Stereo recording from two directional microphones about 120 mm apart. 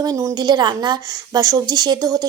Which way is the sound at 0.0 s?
30° right (ahead or behind).